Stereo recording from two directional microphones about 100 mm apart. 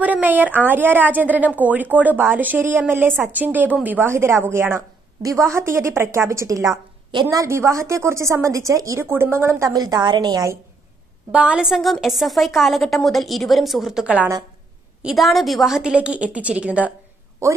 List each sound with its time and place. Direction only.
0.0 s a woman's voice: 15° right (ahead or behind)
9.7 s a woman's voice: 40° right (ahead or behind)
11.3 s a woman's voice: 10° right (ahead or behind)
14.0 s a woman's voice: 15° right (ahead or behind)